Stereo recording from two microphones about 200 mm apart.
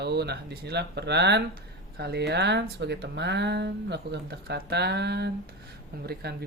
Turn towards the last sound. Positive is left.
turn(degrees=-55)  # may be behind; listen again after turning